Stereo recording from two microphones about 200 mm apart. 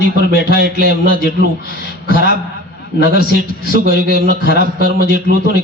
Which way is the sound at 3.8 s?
45° right (ahead or behind).